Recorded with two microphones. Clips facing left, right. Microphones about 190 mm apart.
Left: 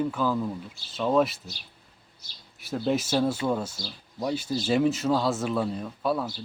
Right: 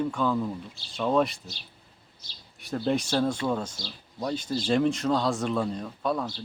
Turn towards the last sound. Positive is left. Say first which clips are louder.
# left 1 dB
turn(degrees=5)  # may be behind; listen again after turning